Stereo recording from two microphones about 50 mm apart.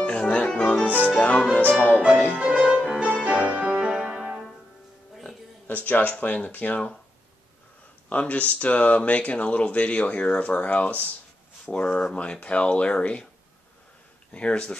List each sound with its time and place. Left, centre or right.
0.0 s music: left
0.8 s music: right
1.1 s music: left
2.3 s music: right
2.6 s music: centre
5.7 s speech: left
8.1 s speech: left
11.7 s speech: centre
12.2 s speech: left
14.3 s speech: left